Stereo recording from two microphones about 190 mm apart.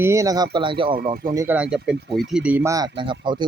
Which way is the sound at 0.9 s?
50° right (ahead or behind).